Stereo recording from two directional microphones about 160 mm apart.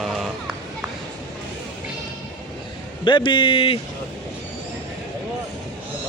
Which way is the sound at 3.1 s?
30° left (ahead or behind).